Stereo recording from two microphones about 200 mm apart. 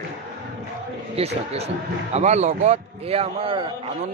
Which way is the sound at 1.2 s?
30° right (ahead or behind).